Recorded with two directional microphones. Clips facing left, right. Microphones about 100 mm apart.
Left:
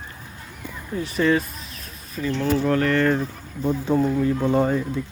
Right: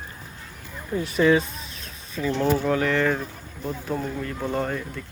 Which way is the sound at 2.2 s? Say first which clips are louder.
Even; 15° right (ahead or behind).